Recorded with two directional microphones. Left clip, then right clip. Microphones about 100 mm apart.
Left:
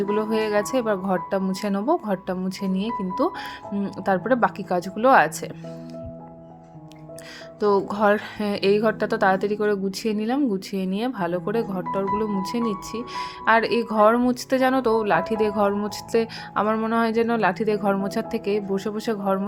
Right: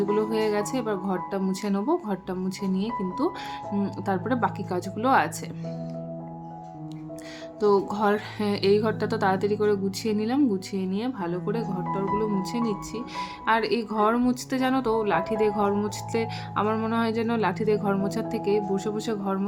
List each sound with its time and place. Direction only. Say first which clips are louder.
0.0 s speech: left 1 dB; 40° left (ahead or behind)
7.6 s speech: left 2 dB; 30° left (ahead or behind)
10.8 s speech: left 4 dB; 50° left (ahead or behind)